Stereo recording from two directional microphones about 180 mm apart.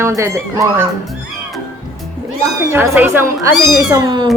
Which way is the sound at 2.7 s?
15° right (ahead or behind).